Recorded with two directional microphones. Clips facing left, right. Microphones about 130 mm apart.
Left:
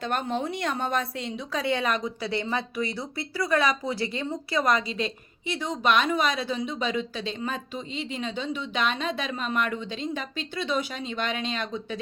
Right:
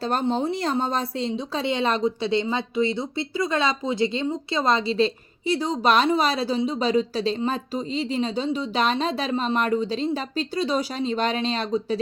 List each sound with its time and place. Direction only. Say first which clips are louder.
0.0 s speech: right 5 dB; 35° right (ahead or behind)